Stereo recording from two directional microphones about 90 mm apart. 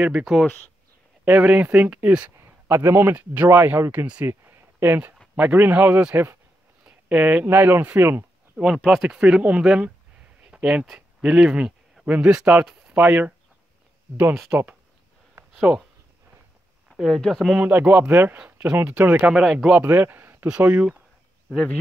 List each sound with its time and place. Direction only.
0.0 s speech: 10° right (ahead or behind)
1.2 s speech: 15° right (ahead or behind)
2.7 s speech: 30° right (ahead or behind)
4.3 s a sound: 25° right (ahead or behind)
5.3 s speech: 20° right (ahead or behind)
7.4 s speech: 25° right (ahead or behind)
8.5 s speech: 5° right (ahead or behind); by 14.7 s 25° right (ahead or behind)
16.9 s speech: 5° right (ahead or behind)
17.6 s speech: 20° right (ahead or behind)
19.3 s speech: 5° right (ahead or behind)
19.7 s speech: 20° right (ahead or behind)
20.4 s speech: 15° right (ahead or behind)